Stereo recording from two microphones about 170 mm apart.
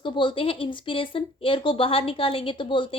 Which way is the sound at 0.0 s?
30° left (ahead or behind).